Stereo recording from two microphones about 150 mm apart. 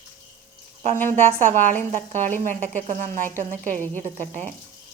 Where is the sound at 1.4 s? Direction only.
60° right (ahead or behind).